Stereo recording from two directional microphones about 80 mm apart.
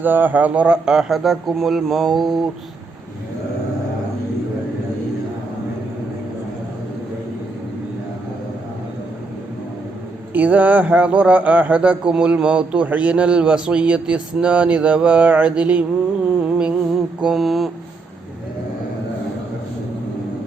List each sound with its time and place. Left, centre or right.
0.0 s speech: right; by 2.5 s centre
10.3 s a man's voice: centre
16.4 s music: centre
16.9 s mantra: centre